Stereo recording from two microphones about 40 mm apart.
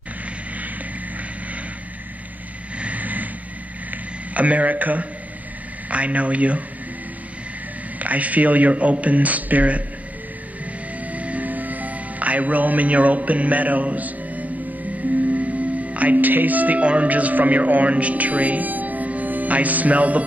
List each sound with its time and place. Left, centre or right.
2.8 s vehicle: right
3.9 s a sound: right
5.9 s a man's voice: right
8.0 s a man's voice: right
10.6 s music: right
15.2 s speech: right